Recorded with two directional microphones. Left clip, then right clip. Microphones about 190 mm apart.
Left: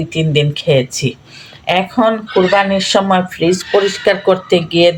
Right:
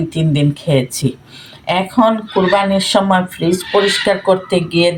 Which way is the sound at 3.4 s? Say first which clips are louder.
Left 1 dB; 30° left (ahead or behind).